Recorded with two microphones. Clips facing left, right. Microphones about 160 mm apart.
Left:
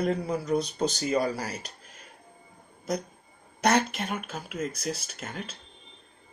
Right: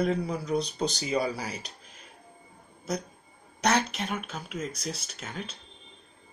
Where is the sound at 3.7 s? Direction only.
50° left (ahead or behind).